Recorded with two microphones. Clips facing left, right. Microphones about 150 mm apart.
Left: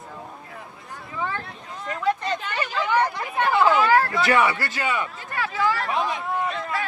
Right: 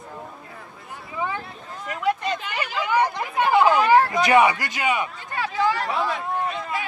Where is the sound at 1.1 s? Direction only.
15° right (ahead or behind).